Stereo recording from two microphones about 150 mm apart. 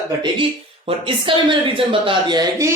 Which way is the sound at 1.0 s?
35° right (ahead or behind).